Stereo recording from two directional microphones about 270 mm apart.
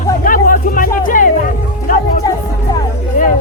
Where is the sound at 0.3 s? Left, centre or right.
Left.